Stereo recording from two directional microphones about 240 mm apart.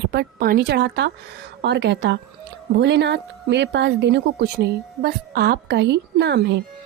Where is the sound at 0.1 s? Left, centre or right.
Right.